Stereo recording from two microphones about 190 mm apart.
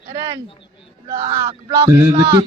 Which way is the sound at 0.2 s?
15° right (ahead or behind).